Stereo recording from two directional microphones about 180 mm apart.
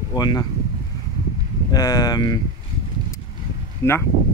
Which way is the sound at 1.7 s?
20° left (ahead or behind).